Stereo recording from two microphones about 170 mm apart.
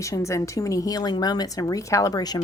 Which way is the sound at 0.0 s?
15° left (ahead or behind).